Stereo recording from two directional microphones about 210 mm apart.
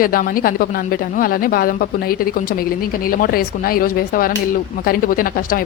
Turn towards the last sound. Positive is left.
turn(degrees=40)  # may be behind; listen again after turning